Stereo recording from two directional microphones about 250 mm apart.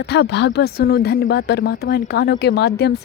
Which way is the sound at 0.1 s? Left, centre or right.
Left.